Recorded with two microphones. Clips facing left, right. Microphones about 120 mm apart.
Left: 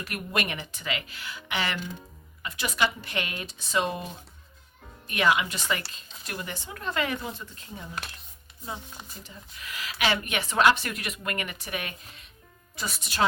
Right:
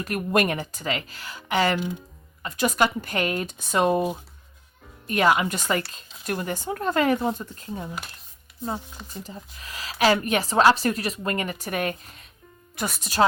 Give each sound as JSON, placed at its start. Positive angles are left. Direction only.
{"t": 0.0, "sound": "speech", "side_deg": -40}
{"t": 5.0, "sound": "speech", "side_deg": -40}
{"t": 9.2, "sound": "speech", "side_deg": -35}